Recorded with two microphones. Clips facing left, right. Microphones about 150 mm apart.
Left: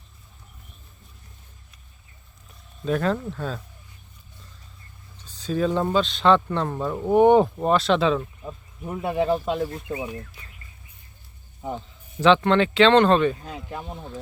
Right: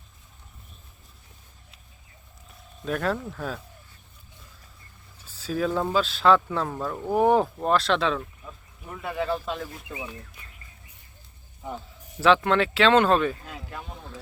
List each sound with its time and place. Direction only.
2.8 s speech: centre (ahead or behind)
5.1 s speech: 5° right (ahead or behind)
8.4 s speech: 25° left (ahead or behind)
12.2 s speech: 5° right (ahead or behind)
13.7 s speech: 25° left (ahead or behind)